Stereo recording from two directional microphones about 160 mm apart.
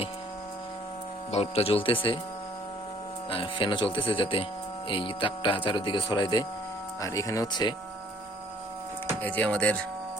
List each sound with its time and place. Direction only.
1.3 s speech: 40° left (ahead or behind)
3.2 s speech: 35° left (ahead or behind)
9.2 s speech: 10° left (ahead or behind)